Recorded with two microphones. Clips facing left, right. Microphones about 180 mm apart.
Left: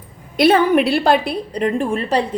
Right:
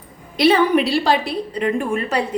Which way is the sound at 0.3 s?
50° left (ahead or behind).